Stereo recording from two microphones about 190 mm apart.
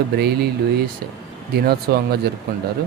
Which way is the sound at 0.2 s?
60° right (ahead or behind).